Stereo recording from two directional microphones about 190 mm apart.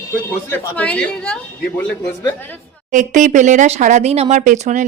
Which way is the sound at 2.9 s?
40° right (ahead or behind).